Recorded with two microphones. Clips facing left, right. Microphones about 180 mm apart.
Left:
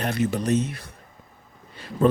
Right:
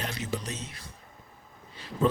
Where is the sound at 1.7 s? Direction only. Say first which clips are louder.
Left 6 dB; 55° left (ahead or behind).